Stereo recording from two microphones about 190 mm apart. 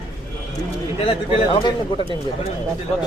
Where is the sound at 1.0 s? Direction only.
30° left (ahead or behind).